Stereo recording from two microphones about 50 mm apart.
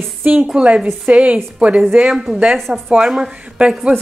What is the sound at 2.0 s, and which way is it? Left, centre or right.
Speech, centre.